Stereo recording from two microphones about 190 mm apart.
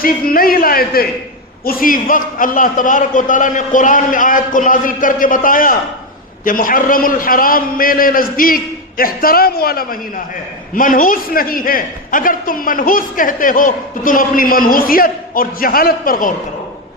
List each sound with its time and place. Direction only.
0.0 s a man's voice: 50° left (ahead or behind)